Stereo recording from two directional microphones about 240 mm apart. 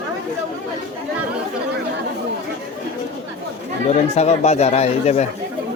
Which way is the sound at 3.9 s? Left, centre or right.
Left.